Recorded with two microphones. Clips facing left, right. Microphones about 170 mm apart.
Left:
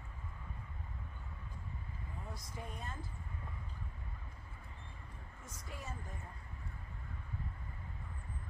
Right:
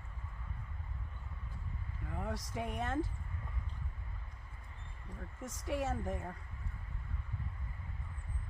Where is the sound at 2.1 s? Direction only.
80° right.